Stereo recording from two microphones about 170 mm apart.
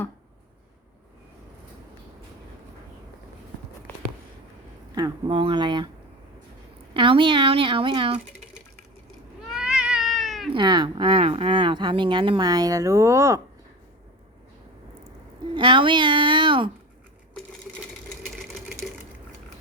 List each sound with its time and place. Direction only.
4.9 s speech: 25° right (ahead or behind)
6.9 s speech: 30° right (ahead or behind)
9.5 s cat: 5° right (ahead or behind)
10.5 s speech: 25° right (ahead or behind)
15.5 s speech: 30° right (ahead or behind)